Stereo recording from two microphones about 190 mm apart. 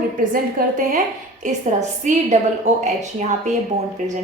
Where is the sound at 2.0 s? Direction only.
40° right (ahead or behind).